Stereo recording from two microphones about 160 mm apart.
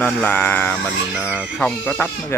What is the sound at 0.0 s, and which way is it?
Speech, 10° left (ahead or behind).